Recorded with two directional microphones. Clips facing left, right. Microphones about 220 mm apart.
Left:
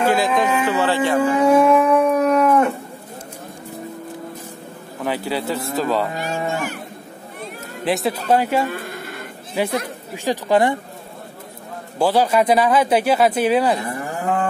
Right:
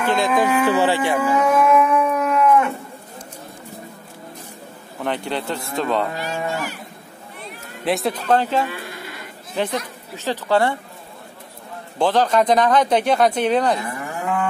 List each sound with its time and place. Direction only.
0.0 s speech: 5° left (ahead or behind)
0.7 s speech: 15° right (ahead or behind)
1.4 s dog: 30° left (ahead or behind)
5.0 s a man's voice: 5° left (ahead or behind)
6.2 s cattle: 50° left (ahead or behind)
7.8 s a man's voice: centre (ahead or behind)
8.6 s sheep: 50° left (ahead or behind)
9.6 s a man's voice: 10° left (ahead or behind)
12.0 s a man's voice: 10° left (ahead or behind)
13.7 s moo: 35° left (ahead or behind)